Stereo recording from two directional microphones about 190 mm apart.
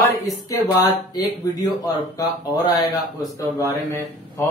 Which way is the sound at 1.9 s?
20° left (ahead or behind).